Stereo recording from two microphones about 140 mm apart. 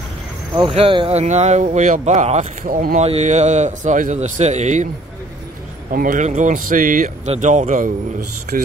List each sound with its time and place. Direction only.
0.6 s speech: 40° right (ahead or behind)
2.6 s speech: 90° right
3.0 s a man's voice: 50° right (ahead or behind)
5.9 s speech: 75° right (ahead or behind)
7.2 s a man's voice: 60° right (ahead or behind)